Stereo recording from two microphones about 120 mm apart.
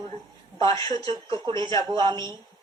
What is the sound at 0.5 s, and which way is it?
A woman's voice, 40° right (ahead or behind).